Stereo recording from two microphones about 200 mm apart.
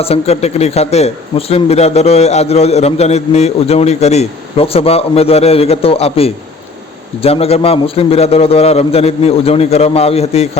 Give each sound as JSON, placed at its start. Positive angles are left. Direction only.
{"t": 0.0, "sound": "speech", "side_deg": 30}